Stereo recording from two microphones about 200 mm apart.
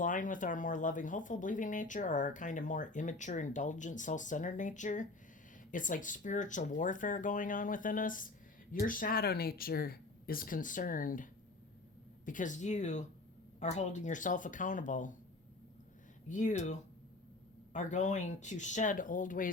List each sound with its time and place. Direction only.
0.0 s speech: 40° left (ahead or behind)
16.3 s speech: 35° left (ahead or behind)
17.7 s speech: 35° left (ahead or behind)